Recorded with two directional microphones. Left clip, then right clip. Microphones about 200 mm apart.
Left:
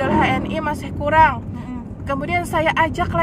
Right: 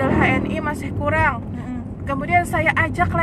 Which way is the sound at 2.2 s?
15° left (ahead or behind).